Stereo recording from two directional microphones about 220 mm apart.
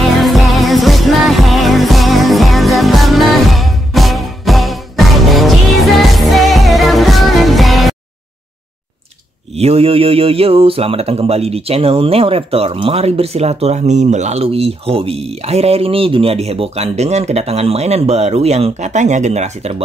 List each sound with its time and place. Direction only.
0.2 s music: centre (ahead or behind)
9.6 s speech: 25° right (ahead or behind)